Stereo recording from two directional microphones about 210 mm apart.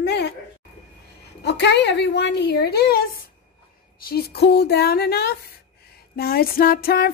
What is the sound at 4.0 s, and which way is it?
Speech, 50° left (ahead or behind).